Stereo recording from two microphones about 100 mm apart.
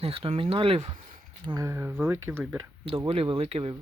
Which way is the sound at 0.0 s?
70° right (ahead or behind).